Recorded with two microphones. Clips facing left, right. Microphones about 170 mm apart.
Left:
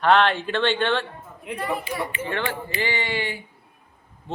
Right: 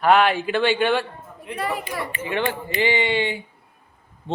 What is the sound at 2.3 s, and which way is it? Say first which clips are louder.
A man's voice: right 3 dB; 15° right (ahead or behind).